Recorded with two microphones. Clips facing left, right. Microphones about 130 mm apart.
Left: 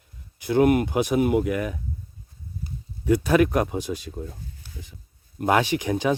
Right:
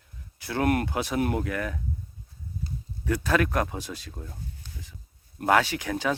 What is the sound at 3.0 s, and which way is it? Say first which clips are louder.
Speech: left 6 dB; 15° left (ahead or behind).